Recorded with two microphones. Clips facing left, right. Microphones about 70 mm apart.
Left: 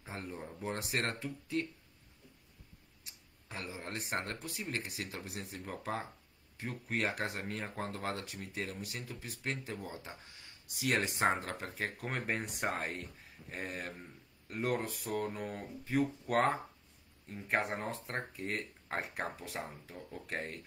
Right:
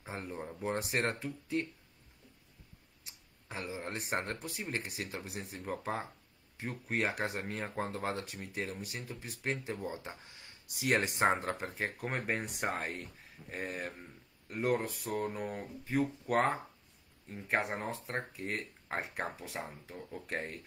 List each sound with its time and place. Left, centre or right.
0.1 s speech: centre
3.4 s a sound: centre
3.7 s speech: centre
4.1 s speech: right
4.6 s speech: centre
10.8 s speech: right
11.7 s speech: centre
12.1 s speech: centre